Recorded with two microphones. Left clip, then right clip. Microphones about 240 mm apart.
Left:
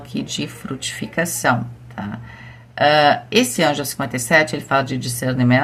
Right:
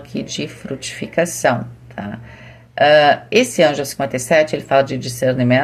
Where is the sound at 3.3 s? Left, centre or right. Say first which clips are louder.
Right 4 dB; left.